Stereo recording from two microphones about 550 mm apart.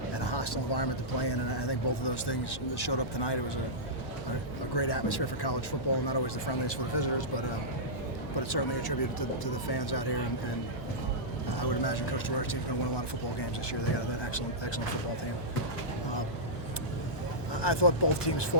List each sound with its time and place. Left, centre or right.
0.2 s speech: left
4.7 s speech: left
11.5 s speech: left
13.9 s speech: left
17.5 s speech: left